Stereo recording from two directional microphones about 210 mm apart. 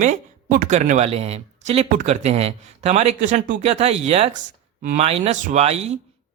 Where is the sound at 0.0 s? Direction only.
40° right (ahead or behind).